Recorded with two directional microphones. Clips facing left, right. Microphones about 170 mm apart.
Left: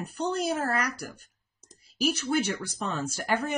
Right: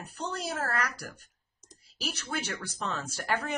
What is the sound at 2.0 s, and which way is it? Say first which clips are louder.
Speech: left 9 dB; 10° left (ahead or behind).